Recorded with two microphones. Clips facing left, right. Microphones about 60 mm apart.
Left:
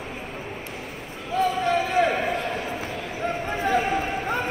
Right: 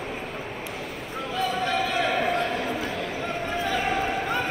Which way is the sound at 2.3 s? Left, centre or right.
Right.